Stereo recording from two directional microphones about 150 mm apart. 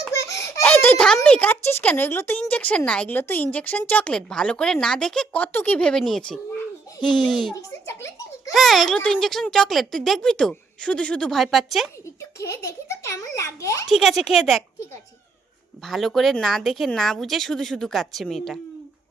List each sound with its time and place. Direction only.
0.1 s a child's voice: 20° left (ahead or behind); by 7.5 s centre (ahead or behind)
7.5 s a child's voice: 20° left (ahead or behind)
8.5 s speech: centre (ahead or behind)
12.4 s a child's voice: 20° left (ahead or behind)
13.8 s speech: centre (ahead or behind)
15.8 s speech: centre (ahead or behind)